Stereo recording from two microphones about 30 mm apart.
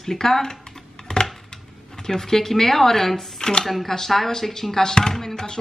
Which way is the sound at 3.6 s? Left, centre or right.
Centre.